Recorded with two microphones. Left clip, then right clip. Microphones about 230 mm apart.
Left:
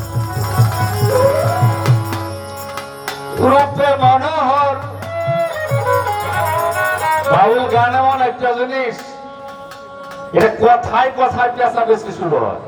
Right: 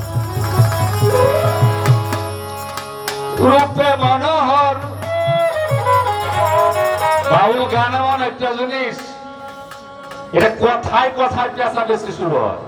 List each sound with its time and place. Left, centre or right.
0.5 s music: right
3.2 s music: right
10.3 s a man's voice: right